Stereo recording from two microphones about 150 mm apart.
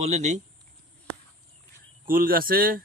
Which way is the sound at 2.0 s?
70° right (ahead or behind).